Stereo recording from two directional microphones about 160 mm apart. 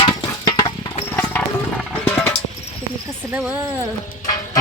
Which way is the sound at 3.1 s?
10° right (ahead or behind).